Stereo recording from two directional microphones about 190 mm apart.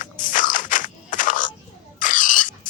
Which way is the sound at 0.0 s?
45° left (ahead or behind).